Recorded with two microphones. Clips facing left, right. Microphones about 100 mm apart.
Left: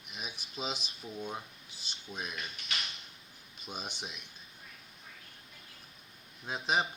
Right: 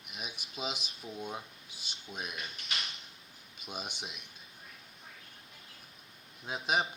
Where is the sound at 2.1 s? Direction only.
5° right (ahead or behind).